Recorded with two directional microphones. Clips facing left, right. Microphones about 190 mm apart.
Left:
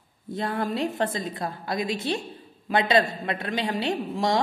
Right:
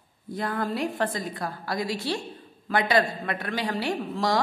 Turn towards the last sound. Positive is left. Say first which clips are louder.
# left 1 dB
turn(degrees=20)  # may be behind; listen again after turning